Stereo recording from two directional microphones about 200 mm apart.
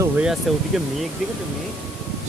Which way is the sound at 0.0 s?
5° right (ahead or behind).